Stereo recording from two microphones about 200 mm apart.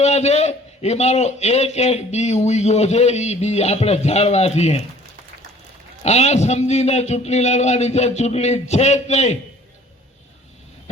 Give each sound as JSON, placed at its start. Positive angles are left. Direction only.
{"t": 0.0, "sound": "a man's voice", "side_deg": 35}
{"t": 6.0, "sound": "a man's voice", "side_deg": 35}